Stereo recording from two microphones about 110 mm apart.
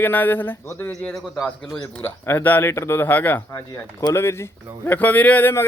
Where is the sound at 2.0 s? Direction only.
20° left (ahead or behind).